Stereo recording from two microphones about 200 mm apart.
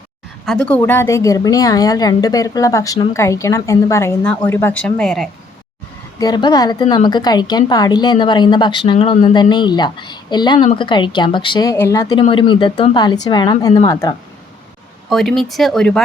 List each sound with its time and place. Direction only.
0.4 s a woman's voice: 5° left (ahead or behind)
6.1 s a woman's voice: 20° left (ahead or behind)
15.1 s speech: centre (ahead or behind)